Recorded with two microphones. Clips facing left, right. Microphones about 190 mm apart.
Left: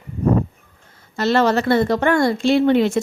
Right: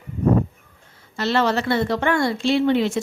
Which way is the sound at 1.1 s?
45° left (ahead or behind).